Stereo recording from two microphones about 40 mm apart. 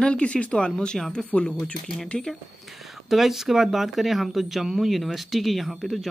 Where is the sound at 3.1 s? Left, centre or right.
Centre.